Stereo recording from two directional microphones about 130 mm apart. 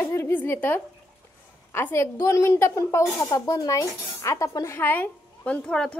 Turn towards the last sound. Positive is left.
turn(degrees=10)  # may be behind; listen again after turning